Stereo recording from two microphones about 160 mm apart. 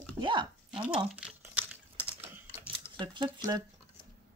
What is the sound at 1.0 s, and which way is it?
Crumpling, 5° right (ahead or behind).